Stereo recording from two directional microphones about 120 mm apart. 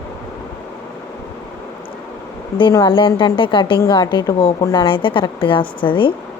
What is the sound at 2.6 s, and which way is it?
A woman's voice, 35° left (ahead or behind).